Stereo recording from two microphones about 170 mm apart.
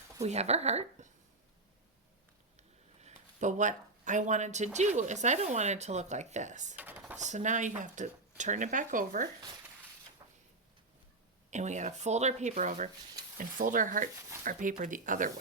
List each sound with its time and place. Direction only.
0.2 s a woman's voice: 40° right (ahead or behind)
2.6 s speech: 40° right (ahead or behind)
6.7 s typing: 10° right (ahead or behind)
7.2 s speech: 45° right (ahead or behind)
10.2 s a sound: 25° right (ahead or behind)
11.5 s speech: 45° right (ahead or behind)